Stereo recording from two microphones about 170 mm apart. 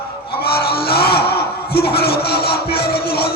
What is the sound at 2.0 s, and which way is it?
Music, 70° left (ahead or behind).